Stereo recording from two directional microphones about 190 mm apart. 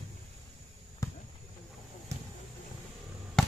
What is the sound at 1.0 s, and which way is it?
Basketball bounce, 20° left (ahead or behind).